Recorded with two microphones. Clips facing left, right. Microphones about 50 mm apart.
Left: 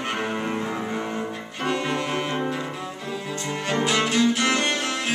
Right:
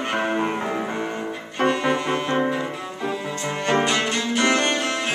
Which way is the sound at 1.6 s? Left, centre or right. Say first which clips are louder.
Right 4 dB; centre.